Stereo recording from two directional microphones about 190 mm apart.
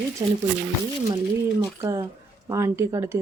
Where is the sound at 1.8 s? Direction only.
15° right (ahead or behind).